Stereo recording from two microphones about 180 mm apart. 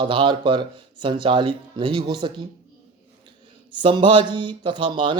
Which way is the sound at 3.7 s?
25° right (ahead or behind).